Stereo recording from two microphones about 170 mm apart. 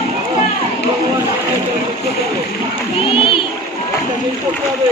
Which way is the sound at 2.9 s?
30° left (ahead or behind).